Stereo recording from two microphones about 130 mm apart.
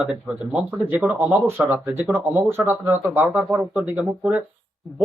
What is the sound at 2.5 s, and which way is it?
Speech, 15° right (ahead or behind).